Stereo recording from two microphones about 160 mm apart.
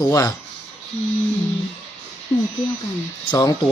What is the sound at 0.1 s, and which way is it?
Speech, 20° left (ahead or behind).